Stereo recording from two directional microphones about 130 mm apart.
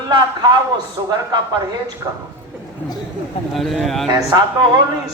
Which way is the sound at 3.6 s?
Centre (ahead or behind).